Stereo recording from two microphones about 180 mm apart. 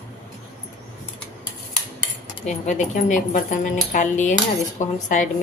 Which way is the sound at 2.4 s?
40° left (ahead or behind).